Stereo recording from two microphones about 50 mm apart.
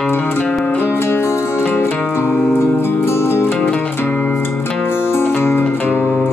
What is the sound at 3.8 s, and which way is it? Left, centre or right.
Music, left.